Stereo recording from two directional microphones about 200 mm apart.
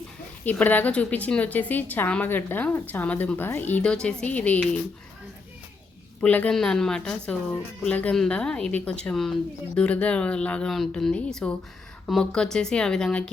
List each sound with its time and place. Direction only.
0.4 s a woman's voice: 10° left (ahead or behind)
6.2 s speech: 5° left (ahead or behind)